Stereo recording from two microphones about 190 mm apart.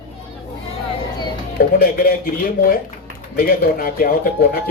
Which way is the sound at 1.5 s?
50° left (ahead or behind).